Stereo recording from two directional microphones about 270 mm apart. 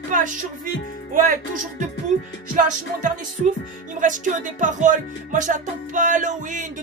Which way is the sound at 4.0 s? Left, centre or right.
Right.